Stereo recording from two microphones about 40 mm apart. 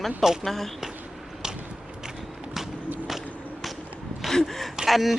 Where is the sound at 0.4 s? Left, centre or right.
Centre.